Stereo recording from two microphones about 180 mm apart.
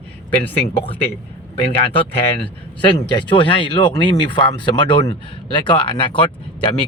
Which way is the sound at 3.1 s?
25° left (ahead or behind).